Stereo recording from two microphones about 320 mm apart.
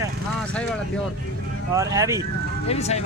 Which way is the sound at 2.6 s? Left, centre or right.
Centre.